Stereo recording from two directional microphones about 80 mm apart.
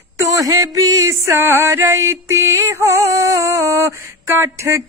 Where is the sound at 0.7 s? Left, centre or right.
Right.